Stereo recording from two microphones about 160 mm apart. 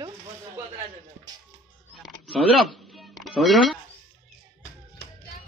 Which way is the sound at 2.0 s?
Centre (ahead or behind).